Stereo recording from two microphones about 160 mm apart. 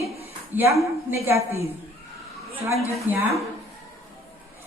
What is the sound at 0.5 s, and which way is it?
Speech, 10° right (ahead or behind).